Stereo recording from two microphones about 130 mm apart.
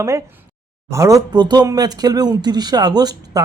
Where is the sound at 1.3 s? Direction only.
35° right (ahead or behind).